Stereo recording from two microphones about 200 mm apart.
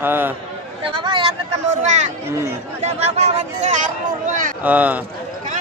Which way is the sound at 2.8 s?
35° right (ahead or behind).